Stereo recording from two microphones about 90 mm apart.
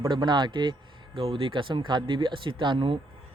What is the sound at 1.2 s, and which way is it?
Speech, 90° right.